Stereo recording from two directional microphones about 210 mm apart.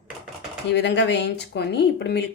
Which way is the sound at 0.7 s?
55° left (ahead or behind).